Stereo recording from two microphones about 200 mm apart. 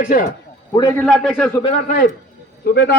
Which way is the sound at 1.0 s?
Centre (ahead or behind).